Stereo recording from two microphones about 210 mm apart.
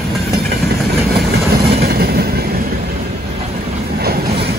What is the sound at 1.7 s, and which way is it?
Train, 45° right (ahead or behind).